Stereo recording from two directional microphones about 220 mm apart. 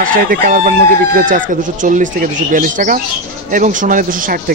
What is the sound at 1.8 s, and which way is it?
Speech, 35° right (ahead or behind).